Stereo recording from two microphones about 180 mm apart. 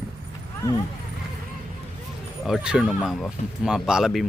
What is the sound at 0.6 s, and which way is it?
Speech, 15° left (ahead or behind).